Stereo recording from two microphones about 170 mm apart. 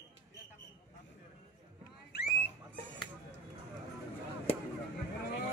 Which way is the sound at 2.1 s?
65° left (ahead or behind).